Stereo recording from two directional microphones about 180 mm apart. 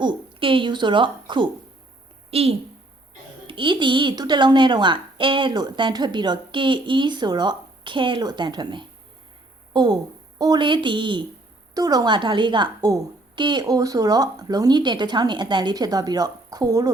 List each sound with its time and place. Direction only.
0.0 s a woman's voice: 25° right (ahead or behind)